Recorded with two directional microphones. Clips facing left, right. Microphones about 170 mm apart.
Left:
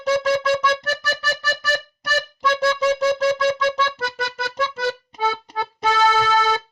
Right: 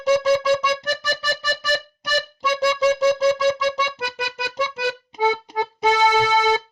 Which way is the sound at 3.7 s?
15° right (ahead or behind).